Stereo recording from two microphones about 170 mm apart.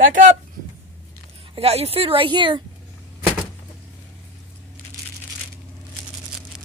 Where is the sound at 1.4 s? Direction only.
35° right (ahead or behind).